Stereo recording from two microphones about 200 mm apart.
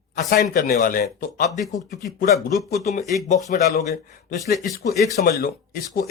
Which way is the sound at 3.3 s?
35° left (ahead or behind).